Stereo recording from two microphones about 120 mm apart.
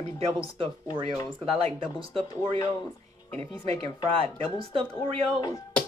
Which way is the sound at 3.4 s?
50° right (ahead or behind).